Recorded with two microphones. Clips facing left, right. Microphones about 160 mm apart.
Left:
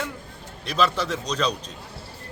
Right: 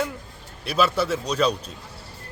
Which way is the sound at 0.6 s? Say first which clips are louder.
Right 2 dB; 10° right (ahead or behind).